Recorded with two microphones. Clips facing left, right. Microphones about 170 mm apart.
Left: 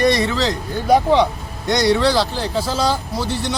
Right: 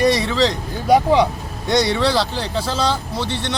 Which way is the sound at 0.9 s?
5° right (ahead or behind).